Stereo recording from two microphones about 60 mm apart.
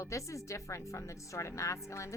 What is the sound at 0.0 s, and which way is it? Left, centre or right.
Speech, left.